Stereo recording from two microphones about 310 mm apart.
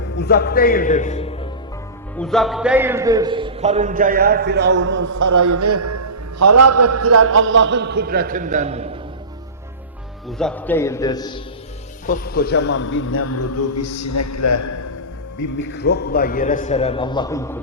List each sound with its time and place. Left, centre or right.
0.2 s a man's voice: left
2.1 s a man's voice: centre; by 5.2 s right
5.2 s a man's voice: right; by 9.0 s centre
10.2 s a man's voice: centre
12.0 s a man's voice: left
15.5 s a man's voice: left; by 17.6 s centre